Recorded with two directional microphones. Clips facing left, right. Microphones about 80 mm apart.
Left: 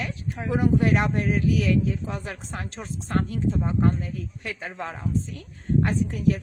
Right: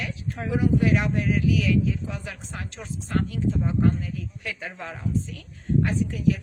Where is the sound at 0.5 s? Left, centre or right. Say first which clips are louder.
Left 1 dB; left.